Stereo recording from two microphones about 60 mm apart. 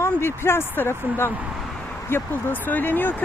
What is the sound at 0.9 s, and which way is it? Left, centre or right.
Speech, right.